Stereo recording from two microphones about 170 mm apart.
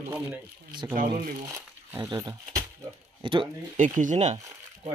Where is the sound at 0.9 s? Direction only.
50° right (ahead or behind).